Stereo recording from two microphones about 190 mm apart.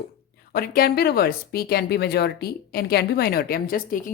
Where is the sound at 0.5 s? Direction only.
50° left (ahead or behind).